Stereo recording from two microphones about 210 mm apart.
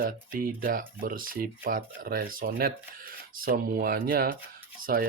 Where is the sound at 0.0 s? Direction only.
40° right (ahead or behind).